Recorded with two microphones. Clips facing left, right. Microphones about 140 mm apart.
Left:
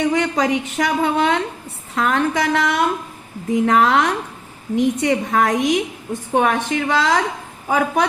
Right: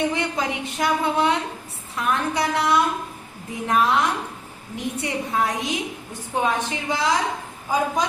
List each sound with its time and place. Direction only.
0.0 s a woman's voice: 80° left
2.0 s a woman's voice: 85° left